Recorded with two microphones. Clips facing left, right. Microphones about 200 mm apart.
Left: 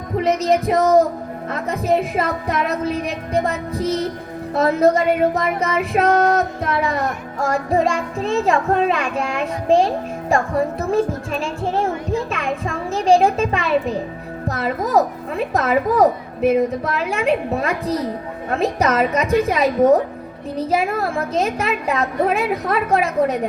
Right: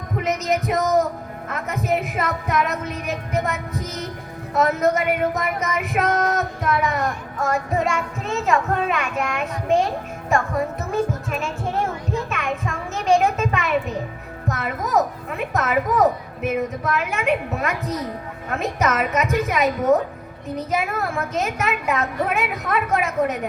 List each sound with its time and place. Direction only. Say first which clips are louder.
0.2 s music: left 5 dB; 30° left (ahead or behind)
12.3 s a child's voice: left 3 dB; 30° left (ahead or behind)
14.4 s music: left 4 dB; 30° left (ahead or behind)